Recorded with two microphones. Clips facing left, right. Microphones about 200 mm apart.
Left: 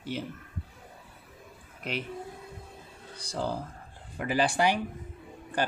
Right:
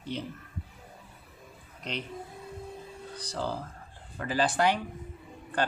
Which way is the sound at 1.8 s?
5° left (ahead or behind).